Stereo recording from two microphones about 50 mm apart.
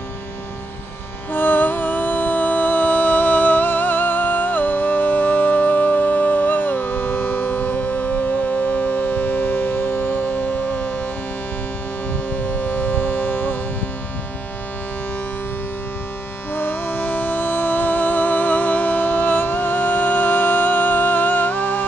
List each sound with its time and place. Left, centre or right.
1.3 s music: left
12.7 s civil defense siren: left
16.5 s music: left